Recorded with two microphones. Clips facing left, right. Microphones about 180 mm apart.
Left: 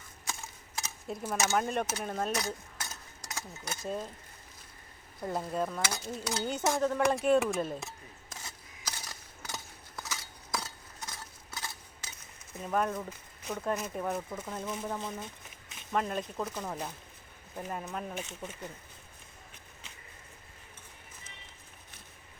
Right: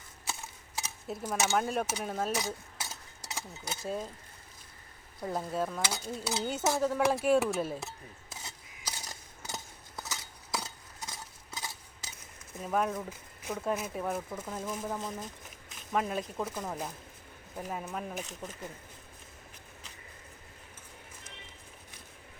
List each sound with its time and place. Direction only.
0.8 s cutlery: 5° right (ahead or behind)
1.2 s speech: 5° left (ahead or behind)
5.2 s speech: centre (ahead or behind)
8.9 s a sound: 15° right (ahead or behind)
10.5 s cutlery: 10° right (ahead or behind)
12.5 s speech: 5° right (ahead or behind)